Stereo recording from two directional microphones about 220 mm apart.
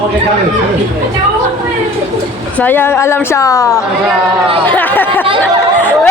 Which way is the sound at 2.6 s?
10° left (ahead or behind).